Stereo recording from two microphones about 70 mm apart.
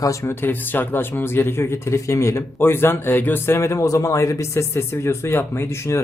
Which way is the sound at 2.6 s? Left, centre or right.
Left.